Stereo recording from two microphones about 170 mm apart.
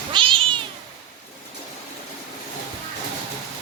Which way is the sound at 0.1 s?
30° right (ahead or behind).